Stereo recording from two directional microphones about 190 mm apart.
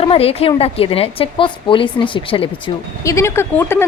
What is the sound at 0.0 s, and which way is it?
Speech, 30° left (ahead or behind).